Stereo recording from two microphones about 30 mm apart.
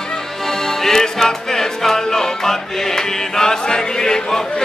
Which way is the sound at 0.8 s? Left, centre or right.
Centre.